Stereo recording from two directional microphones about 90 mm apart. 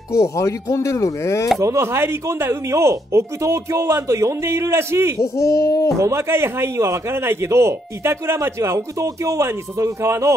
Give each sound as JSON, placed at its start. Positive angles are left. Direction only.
{"t": 0.1, "sound": "speech", "side_deg": 35}
{"t": 1.6, "sound": "a man's voice", "side_deg": -30}
{"t": 5.2, "sound": "speech", "side_deg": 35}
{"t": 5.9, "sound": "a man's voice", "side_deg": -30}